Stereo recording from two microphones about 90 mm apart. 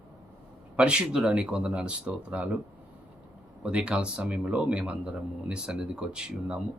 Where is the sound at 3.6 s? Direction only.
10° right (ahead or behind).